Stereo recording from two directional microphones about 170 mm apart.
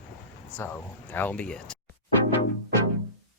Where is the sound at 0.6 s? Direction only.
15° left (ahead or behind).